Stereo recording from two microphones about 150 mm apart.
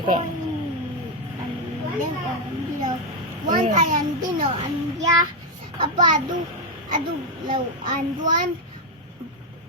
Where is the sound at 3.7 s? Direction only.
55° right (ahead or behind).